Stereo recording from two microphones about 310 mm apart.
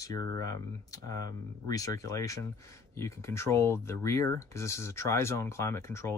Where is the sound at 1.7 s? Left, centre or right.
Centre.